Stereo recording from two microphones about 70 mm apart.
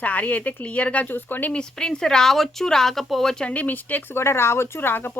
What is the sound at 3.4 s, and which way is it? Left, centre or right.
Speech, left.